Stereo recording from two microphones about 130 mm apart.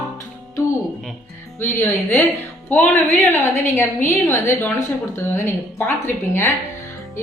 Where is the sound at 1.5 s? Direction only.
15° left (ahead or behind).